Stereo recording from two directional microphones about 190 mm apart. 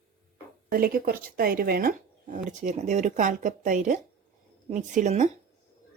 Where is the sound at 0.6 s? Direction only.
50° right (ahead or behind).